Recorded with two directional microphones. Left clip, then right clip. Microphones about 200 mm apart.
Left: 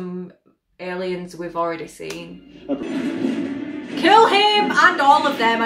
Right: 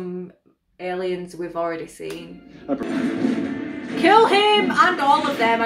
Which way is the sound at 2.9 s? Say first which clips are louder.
Right 1 dB; 40° right (ahead or behind).